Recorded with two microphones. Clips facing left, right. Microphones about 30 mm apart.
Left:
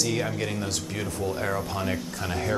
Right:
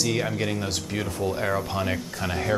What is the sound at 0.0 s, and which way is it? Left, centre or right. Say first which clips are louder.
Speech: right 2 dB; centre.